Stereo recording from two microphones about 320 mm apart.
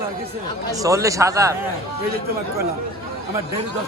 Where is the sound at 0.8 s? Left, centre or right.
Centre.